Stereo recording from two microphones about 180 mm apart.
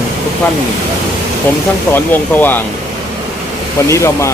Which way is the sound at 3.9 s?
15° left (ahead or behind).